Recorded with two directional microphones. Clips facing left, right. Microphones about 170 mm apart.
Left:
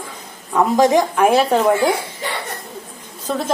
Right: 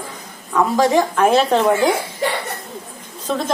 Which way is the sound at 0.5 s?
20° left (ahead or behind).